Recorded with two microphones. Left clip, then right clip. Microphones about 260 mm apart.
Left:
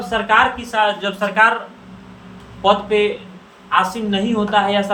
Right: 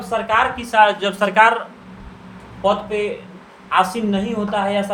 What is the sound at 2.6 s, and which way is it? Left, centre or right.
A woman's voice, right.